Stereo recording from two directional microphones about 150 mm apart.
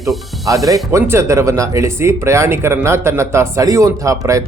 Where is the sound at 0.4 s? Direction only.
20° right (ahead or behind).